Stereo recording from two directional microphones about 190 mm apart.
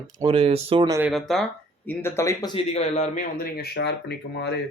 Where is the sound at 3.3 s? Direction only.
55° left (ahead or behind).